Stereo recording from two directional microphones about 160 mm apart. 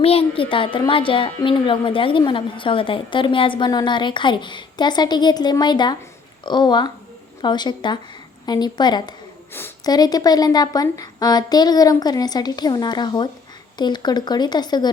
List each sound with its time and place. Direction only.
0.0 s speech: 35° left (ahead or behind)
9.5 s a sound: 15° left (ahead or behind)
9.9 s speech: 25° left (ahead or behind)